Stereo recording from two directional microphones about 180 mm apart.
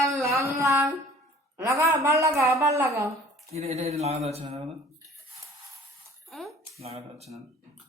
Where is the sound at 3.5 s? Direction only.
35° right (ahead or behind).